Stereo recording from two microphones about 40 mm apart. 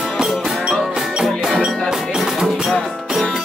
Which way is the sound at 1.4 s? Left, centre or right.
Centre.